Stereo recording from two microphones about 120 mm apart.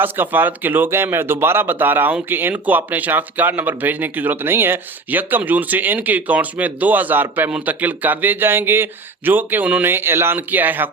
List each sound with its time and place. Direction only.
0.0 s speech: 15° right (ahead or behind)